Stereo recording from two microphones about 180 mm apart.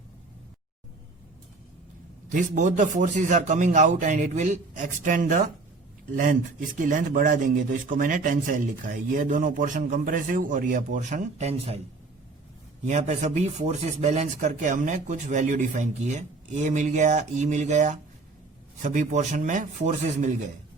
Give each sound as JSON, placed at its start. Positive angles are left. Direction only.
{"t": 2.3, "sound": "speech", "side_deg": -45}
{"t": 12.8, "sound": "speech", "side_deg": -40}